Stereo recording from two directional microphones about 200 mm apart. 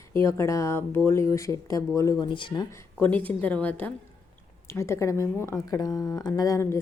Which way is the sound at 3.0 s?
10° left (ahead or behind).